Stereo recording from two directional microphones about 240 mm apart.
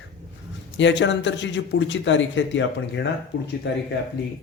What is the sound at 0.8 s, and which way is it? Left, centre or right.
A man's voice, left.